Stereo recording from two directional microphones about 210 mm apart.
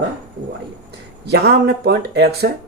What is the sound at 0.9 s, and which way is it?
Speech, 50° right (ahead or behind).